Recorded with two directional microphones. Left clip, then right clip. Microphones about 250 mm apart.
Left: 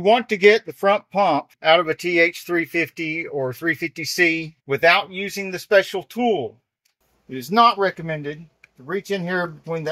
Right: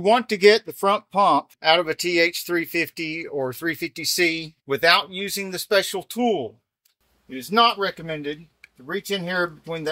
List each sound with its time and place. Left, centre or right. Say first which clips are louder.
0.0 s speech: left 1 dB; centre
7.3 s speech: left 3 dB; left
8.1 s speech: left 1 dB; centre